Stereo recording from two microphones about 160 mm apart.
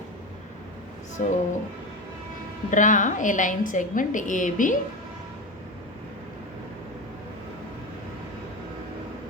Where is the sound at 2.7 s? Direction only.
50° left (ahead or behind).